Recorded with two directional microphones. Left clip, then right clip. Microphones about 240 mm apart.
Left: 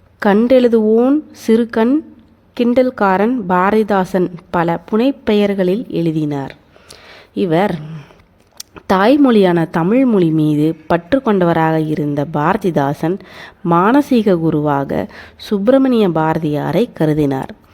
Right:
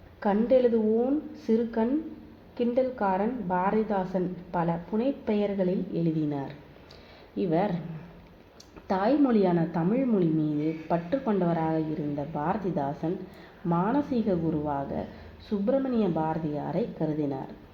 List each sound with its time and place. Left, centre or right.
0.2 s a woman's voice: left